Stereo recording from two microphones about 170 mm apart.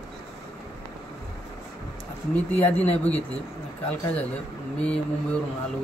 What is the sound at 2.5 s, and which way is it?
Speech, 10° left (ahead or behind).